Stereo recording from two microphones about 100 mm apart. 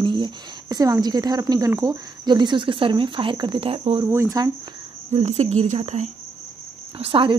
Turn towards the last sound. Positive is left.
turn(degrees=-65)  # may be behind; listen again after turning